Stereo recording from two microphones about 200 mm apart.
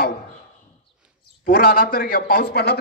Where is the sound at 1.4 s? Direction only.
45° left (ahead or behind).